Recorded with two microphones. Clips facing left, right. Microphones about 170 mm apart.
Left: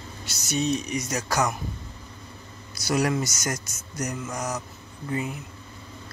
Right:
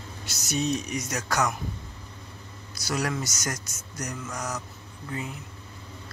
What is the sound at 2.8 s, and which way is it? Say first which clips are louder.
Speech: left 5 dB; 10° left (ahead or behind).